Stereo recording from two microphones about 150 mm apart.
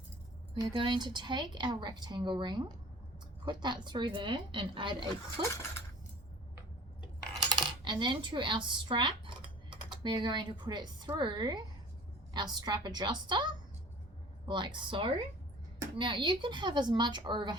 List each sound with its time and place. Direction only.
0.5 s speech: 30° right (ahead or behind)
7.3 s coin: 30° right (ahead or behind)
12.3 s a woman's voice: 30° right (ahead or behind)